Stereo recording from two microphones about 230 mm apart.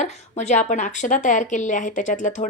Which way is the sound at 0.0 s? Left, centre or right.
Left.